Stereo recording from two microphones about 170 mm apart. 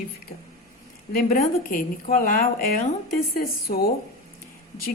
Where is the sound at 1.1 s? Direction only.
55° left (ahead or behind).